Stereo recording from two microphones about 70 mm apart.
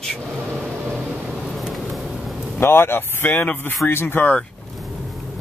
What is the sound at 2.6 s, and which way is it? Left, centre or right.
Speech, left.